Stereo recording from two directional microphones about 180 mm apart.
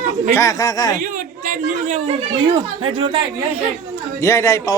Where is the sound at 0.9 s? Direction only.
45° right (ahead or behind).